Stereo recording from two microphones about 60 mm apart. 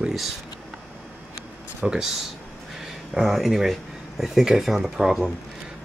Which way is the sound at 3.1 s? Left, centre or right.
Centre.